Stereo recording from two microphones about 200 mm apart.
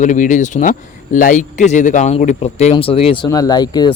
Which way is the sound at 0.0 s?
40° left (ahead or behind).